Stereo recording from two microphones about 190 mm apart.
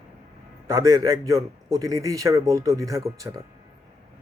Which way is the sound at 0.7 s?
15° right (ahead or behind).